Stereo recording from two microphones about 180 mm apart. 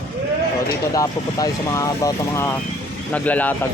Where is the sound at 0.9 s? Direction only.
20° left (ahead or behind).